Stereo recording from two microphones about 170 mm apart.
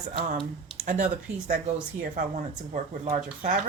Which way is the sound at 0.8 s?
50° right (ahead or behind).